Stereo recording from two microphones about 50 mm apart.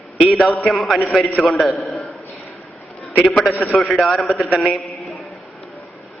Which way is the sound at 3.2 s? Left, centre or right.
Centre.